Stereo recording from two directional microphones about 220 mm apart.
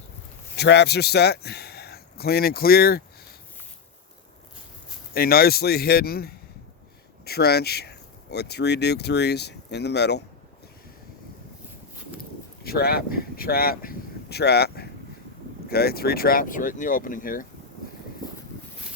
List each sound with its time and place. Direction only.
0.5 s a man's voice: 50° left (ahead or behind)
5.1 s speech: 45° left (ahead or behind)
12.6 s speech: 45° left (ahead or behind)